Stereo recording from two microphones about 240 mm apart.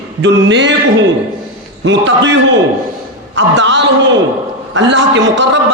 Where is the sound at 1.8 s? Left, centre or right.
Right.